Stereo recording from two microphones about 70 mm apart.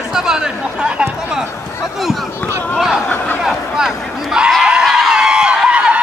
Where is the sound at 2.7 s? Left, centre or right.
Centre.